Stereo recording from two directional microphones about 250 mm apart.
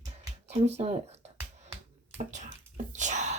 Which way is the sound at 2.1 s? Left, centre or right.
Right.